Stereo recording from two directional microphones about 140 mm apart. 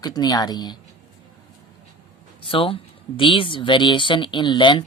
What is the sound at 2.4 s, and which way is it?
Speech, 40° left (ahead or behind).